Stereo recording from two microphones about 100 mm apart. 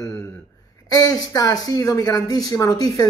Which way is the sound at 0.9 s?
40° left (ahead or behind).